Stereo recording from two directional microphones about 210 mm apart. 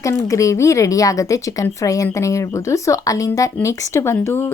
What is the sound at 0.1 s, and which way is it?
A woman's voice, 15° left (ahead or behind).